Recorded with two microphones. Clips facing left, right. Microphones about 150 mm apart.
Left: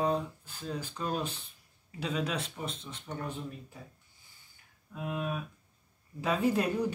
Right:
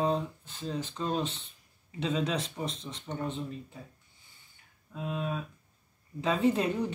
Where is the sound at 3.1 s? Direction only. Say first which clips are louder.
Right 2 dB; 10° right (ahead or behind).